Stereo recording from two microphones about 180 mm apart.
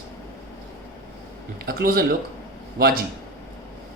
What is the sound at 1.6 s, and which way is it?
Speech, 55° right (ahead or behind).